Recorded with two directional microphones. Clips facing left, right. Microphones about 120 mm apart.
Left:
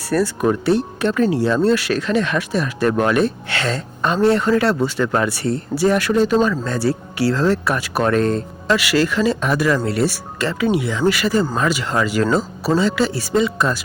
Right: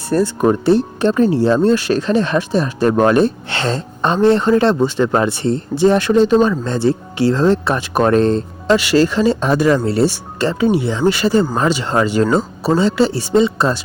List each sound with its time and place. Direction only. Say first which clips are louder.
0.1 s speech: right 3 dB; 30° right (ahead or behind)